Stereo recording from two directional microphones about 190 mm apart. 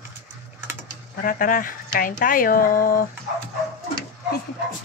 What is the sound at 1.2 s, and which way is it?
Speech, 45° left (ahead or behind).